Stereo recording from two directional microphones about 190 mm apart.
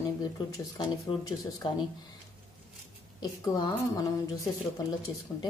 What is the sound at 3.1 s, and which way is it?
Speech, 20° left (ahead or behind).